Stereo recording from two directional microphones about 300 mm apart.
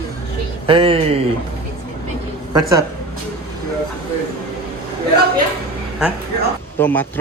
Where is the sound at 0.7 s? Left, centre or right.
Centre.